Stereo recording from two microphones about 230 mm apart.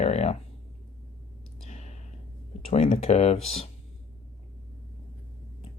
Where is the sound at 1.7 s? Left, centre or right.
Left.